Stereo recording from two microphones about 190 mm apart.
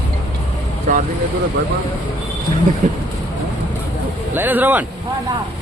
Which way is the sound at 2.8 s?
45° right (ahead or behind).